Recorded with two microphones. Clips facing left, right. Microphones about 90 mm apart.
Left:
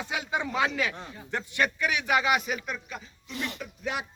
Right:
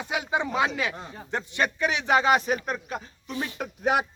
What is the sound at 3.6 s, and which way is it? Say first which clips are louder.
Speech: right 9 dB; 65° right (ahead or behind).